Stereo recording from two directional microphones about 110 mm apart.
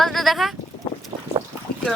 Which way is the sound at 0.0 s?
Centre (ahead or behind).